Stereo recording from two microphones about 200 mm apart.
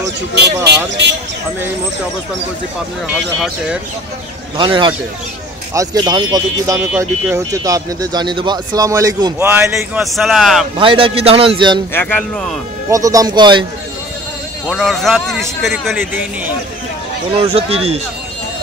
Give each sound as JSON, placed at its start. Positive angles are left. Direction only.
{"t": 3.2, "sound": "a man's voice", "side_deg": 0}
{"t": 4.6, "sound": "a man's voice", "side_deg": -25}
{"t": 10.8, "sound": "a man's voice", "side_deg": -25}
{"t": 11.9, "sound": "speech", "side_deg": 10}
{"t": 12.9, "sound": "a man's voice", "side_deg": -15}
{"t": 14.7, "sound": "a man's voice", "side_deg": 0}
{"t": 17.3, "sound": "a man's voice", "side_deg": -30}